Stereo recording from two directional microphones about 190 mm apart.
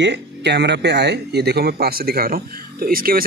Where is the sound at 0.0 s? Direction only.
65° right (ahead or behind).